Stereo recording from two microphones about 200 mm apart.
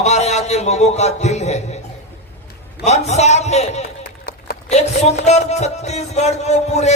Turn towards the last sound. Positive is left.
turn(degrees=35)  # may be behind; listen again after turning